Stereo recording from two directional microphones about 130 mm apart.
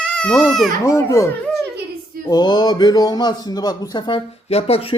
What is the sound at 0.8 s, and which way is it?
Speech, 25° left (ahead or behind).